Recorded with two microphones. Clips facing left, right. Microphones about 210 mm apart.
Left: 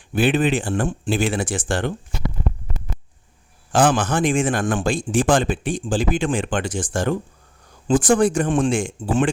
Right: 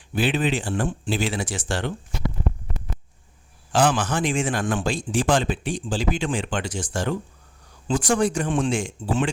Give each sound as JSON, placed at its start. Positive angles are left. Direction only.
{"t": 0.1, "sound": "speech", "side_deg": 50}
{"t": 3.7, "sound": "speech", "side_deg": 50}